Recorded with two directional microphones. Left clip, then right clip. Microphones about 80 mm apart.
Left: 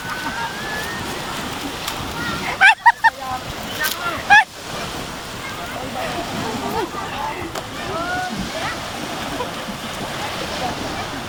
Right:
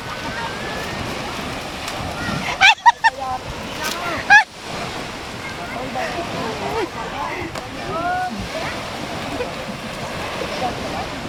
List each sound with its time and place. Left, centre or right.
2.2 s a sound: right
2.8 s goose: right
4.3 s waves: right